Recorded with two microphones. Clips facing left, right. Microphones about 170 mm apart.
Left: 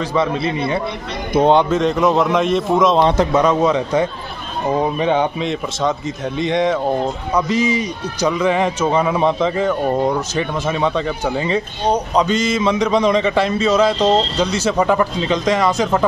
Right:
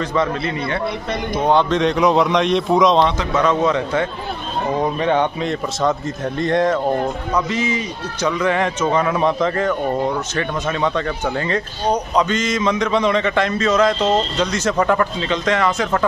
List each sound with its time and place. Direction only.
0.0 s speech: 5° left (ahead or behind)
1.4 s speech: 20° left (ahead or behind)
1.7 s a man's voice: centre (ahead or behind)
3.3 s speech: 10° left (ahead or behind)
6.0 s speech: 90° left
6.5 s a man's voice: centre (ahead or behind)
7.4 s a man's voice: 35° left (ahead or behind)
7.7 s speech: 10° left (ahead or behind)